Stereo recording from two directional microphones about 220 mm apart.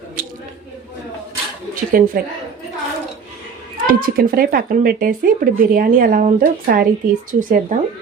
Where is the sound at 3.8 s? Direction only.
40° right (ahead or behind).